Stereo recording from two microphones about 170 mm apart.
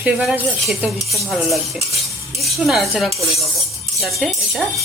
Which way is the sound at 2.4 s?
Centre (ahead or behind).